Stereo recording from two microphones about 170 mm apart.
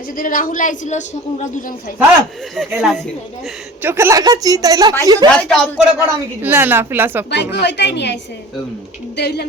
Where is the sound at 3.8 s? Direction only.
15° right (ahead or behind).